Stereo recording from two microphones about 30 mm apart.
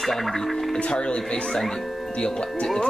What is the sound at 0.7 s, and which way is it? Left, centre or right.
Speech, left.